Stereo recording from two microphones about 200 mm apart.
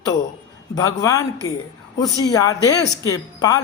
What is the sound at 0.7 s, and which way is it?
Speech, 15° left (ahead or behind).